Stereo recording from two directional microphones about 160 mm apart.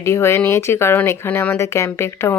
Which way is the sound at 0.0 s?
15° left (ahead or behind).